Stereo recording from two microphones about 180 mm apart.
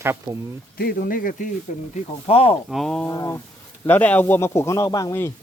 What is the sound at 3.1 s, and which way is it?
A man's voice, 15° left (ahead or behind).